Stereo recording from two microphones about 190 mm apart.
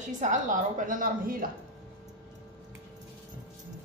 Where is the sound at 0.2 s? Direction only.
40° right (ahead or behind).